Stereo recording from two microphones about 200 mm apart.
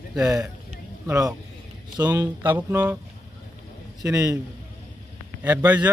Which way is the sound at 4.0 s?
15° right (ahead or behind).